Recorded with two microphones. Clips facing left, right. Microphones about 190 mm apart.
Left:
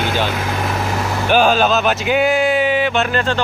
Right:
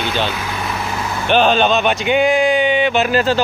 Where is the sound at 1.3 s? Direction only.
5° left (ahead or behind).